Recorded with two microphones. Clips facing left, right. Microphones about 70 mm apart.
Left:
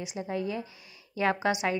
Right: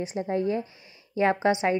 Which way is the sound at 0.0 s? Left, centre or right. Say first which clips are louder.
Right 6 dB; right.